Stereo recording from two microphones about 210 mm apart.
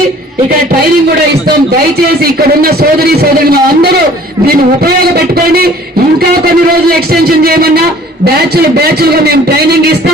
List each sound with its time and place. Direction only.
2.2 s a man's voice: 45° right (ahead or behind)
6.9 s a man's voice: 45° right (ahead or behind)